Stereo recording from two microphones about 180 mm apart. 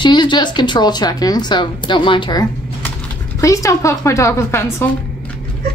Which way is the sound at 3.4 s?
15° left (ahead or behind).